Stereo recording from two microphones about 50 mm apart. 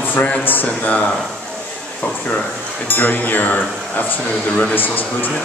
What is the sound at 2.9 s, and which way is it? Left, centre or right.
Speech, left.